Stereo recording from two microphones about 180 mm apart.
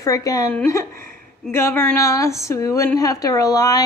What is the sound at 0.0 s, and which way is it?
A woman's voice, 20° left (ahead or behind).